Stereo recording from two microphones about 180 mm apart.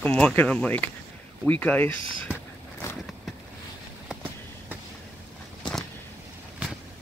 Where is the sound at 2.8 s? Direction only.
15° left (ahead or behind).